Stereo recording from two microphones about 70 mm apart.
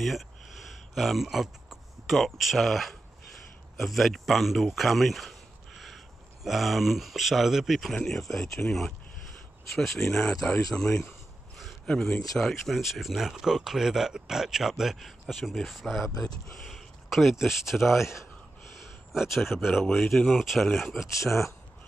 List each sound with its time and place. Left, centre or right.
0.0 s a sound: centre
3.7 s speech: centre
10.9 s speech: left
11.5 s a sound: centre
11.9 s speech: centre
19.1 s speech: centre
21.1 s speech: left